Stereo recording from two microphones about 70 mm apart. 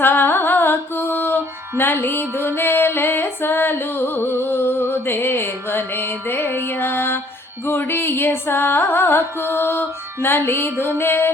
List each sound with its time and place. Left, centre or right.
0.0 s music: left